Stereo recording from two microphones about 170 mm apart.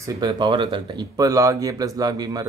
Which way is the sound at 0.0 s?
25° right (ahead or behind).